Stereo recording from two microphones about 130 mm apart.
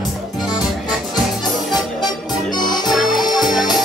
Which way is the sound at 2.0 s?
35° left (ahead or behind).